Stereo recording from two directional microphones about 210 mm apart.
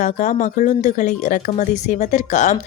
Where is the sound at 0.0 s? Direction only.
35° left (ahead or behind).